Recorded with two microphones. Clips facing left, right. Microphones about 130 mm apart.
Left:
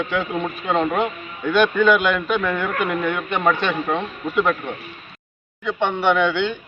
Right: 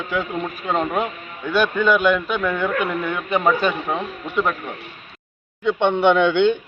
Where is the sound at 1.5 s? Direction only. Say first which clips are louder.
Left 2 dB; 5° right (ahead or behind).